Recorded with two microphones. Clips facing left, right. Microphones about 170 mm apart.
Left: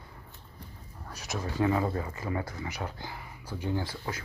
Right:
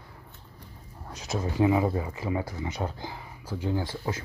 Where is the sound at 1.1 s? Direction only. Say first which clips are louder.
Right 4 dB; 25° right (ahead or behind).